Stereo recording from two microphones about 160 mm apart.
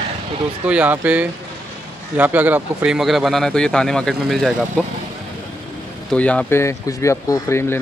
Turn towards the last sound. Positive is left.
turn(degrees=20)  # may be behind; listen again after turning